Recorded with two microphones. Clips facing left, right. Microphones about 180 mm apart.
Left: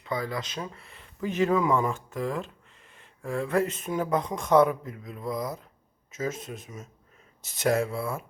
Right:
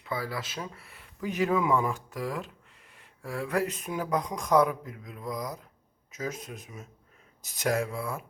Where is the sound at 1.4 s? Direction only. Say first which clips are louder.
Left 2 dB; 5° right (ahead or behind).